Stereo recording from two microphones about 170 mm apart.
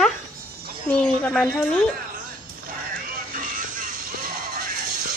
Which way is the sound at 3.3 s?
50° right (ahead or behind).